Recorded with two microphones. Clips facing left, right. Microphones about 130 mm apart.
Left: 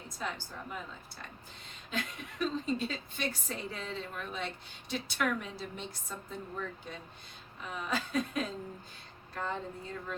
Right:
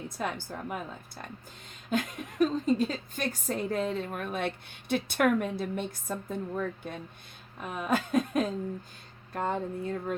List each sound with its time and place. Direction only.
0.2 s a woman's voice: 55° right (ahead or behind)
2.4 s a woman's voice: 45° right (ahead or behind)